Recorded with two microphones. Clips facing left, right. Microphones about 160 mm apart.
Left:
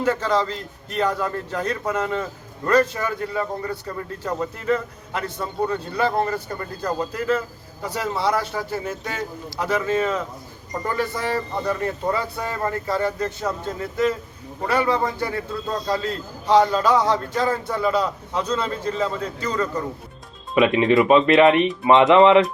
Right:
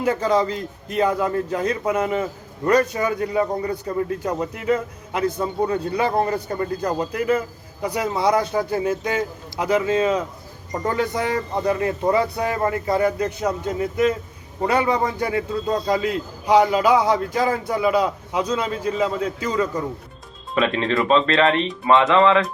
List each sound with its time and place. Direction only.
0.0 s a man's voice: 10° right (ahead or behind)
20.6 s speech: 15° left (ahead or behind)